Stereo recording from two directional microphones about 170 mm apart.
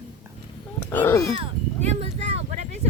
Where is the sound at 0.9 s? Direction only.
15° left (ahead or behind).